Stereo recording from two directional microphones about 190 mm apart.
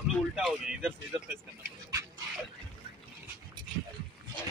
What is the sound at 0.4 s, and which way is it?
Speech, centre (ahead or behind).